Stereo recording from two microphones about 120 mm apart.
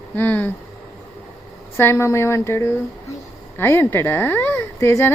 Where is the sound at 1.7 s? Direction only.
20° left (ahead or behind).